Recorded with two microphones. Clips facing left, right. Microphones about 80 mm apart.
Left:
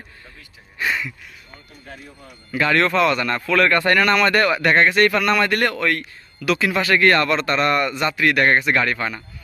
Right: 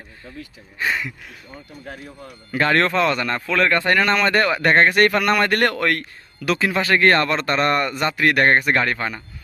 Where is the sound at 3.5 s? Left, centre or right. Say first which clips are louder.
Left 2 dB; centre.